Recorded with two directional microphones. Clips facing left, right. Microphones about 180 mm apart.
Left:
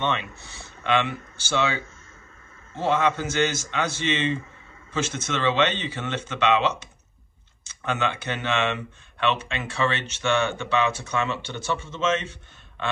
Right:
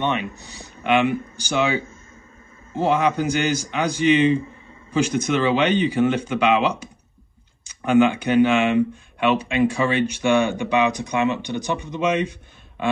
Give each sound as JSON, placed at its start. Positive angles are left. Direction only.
{"t": 0.0, "sound": "speech", "side_deg": -15}